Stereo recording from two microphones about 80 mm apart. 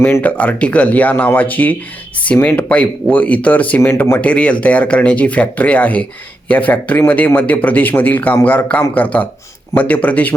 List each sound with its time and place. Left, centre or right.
0.2 s speech: centre
3.8 s speech: left
4.2 s speech: centre